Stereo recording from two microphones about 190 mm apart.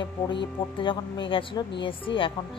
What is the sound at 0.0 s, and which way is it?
A woman's voice, 25° left (ahead or behind).